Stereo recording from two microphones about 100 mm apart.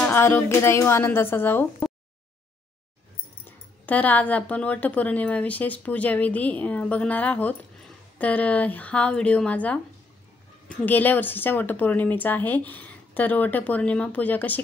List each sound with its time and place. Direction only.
0.0 s speech: 25° left (ahead or behind)
3.4 s speech: 15° left (ahead or behind)
10.8 s speech: 15° left (ahead or behind)